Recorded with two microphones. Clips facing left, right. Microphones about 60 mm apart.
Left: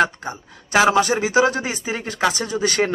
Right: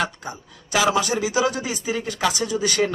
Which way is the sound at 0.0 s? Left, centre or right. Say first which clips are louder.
Left 6 dB; left.